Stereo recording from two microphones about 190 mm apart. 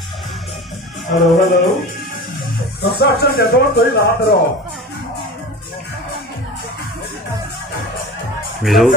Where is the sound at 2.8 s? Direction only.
55° left (ahead or behind).